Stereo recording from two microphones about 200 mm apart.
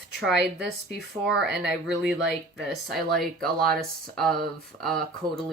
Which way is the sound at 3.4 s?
50° right (ahead or behind).